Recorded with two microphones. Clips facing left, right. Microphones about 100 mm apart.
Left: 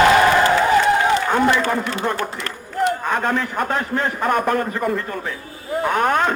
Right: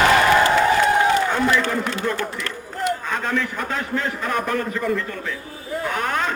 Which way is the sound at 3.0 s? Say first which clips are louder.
Left 3 dB; 55° left (ahead or behind).